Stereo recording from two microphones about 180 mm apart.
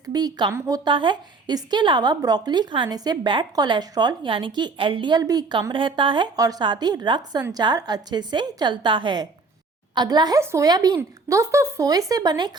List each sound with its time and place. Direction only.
0.0 s a woman's voice: 20° right (ahead or behind)